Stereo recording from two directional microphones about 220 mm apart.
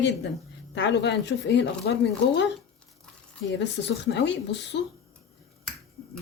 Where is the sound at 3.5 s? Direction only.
50° left (ahead or behind).